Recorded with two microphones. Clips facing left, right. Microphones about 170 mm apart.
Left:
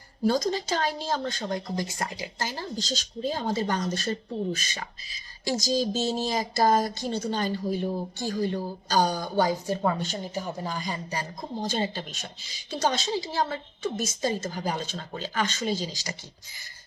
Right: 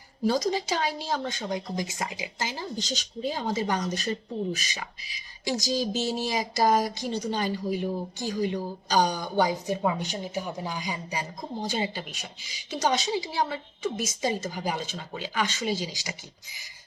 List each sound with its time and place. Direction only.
0.3 s speech: 15° right (ahead or behind)